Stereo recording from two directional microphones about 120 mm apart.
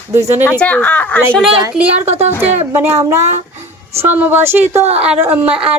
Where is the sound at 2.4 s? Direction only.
20° right (ahead or behind).